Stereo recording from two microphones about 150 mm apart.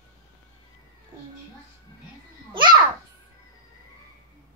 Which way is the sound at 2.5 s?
30° right (ahead or behind).